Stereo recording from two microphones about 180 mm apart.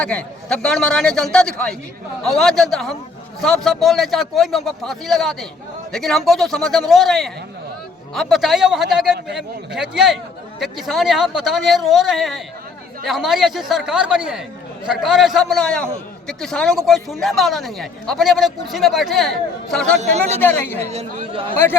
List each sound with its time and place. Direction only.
0.0 s a man's voice: 5° left (ahead or behind)
20.0 s speech: 40° right (ahead or behind)
20.4 s speech: 10° left (ahead or behind)
20.8 s speech: 35° right (ahead or behind)